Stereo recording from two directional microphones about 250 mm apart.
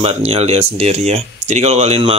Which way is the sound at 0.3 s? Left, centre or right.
Right.